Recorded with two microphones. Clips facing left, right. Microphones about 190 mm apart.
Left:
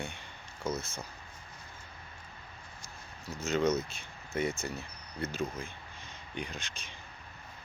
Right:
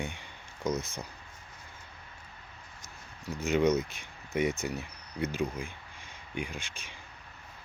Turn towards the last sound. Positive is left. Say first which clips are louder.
# right 2 dB
turn(degrees=-10)  # may be behind; listen again after turning